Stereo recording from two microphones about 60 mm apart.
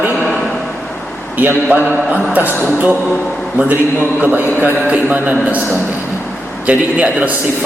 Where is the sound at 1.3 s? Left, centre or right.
Right.